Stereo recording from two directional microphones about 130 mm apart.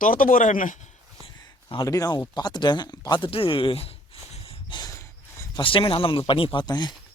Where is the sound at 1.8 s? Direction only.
25° left (ahead or behind); by 3.9 s 45° left (ahead or behind).